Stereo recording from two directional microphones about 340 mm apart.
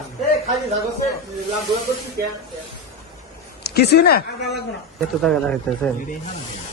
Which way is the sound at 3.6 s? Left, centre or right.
Left.